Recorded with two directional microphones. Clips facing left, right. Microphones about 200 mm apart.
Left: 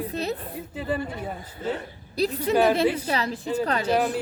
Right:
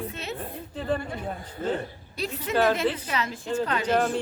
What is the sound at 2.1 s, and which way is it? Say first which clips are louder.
A woman's voice: left 5 dB; 35° left (ahead or behind).